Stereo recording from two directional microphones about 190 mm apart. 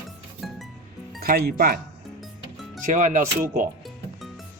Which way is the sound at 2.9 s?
45° right (ahead or behind).